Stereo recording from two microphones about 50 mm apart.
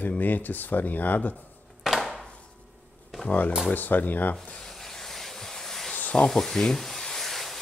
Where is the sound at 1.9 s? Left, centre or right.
Centre.